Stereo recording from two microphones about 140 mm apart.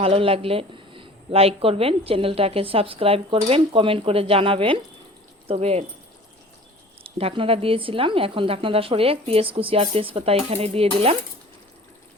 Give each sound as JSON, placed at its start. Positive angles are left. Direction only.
{"t": 0.0, "sound": "speech", "side_deg": -40}
{"t": 7.0, "sound": "speech", "side_deg": -40}